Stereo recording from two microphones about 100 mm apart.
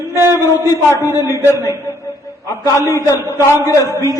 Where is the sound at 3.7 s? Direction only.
35° left (ahead or behind).